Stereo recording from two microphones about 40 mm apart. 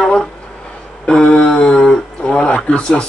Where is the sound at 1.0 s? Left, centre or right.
Left.